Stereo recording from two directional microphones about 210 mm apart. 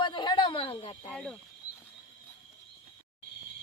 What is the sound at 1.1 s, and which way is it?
Speech, 5° left (ahead or behind).